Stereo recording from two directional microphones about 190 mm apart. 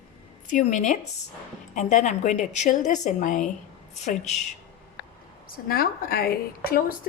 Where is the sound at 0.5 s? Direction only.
40° left (ahead or behind).